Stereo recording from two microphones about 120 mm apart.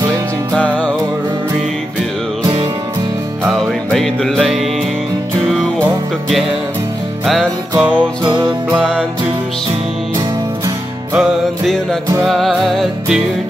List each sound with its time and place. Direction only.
0.6 s music: 10° left (ahead or behind)
3.4 s music: 5° left (ahead or behind)
7.7 s music: 10° right (ahead or behind)
8.2 s music: 40° right (ahead or behind)
11.1 s music: 5° left (ahead or behind)